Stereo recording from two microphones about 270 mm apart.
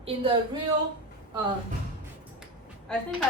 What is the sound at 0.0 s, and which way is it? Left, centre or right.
Speech, centre.